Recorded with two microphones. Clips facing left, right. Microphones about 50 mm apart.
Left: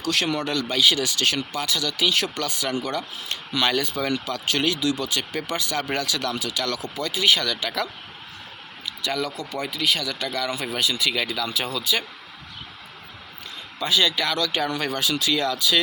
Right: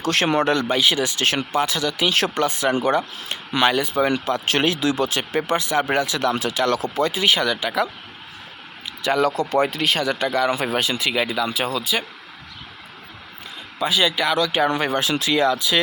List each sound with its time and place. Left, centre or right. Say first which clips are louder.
0.0 s speech: right 5 dB; right
0.7 s speech: right 2 dB; right
4.4 s speech: right 1 dB; right
6.3 s speech: right 7 dB; right
9.0 s speech: right 8 dB; right
9.3 s speech: right 10 dB; right
11.1 s speech: right 4 dB; centre
13.7 s speech: right 2 dB; centre